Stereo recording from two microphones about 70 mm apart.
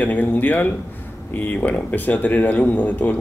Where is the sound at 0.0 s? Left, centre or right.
Left.